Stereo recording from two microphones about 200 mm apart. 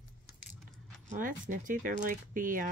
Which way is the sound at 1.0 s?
40° right (ahead or behind).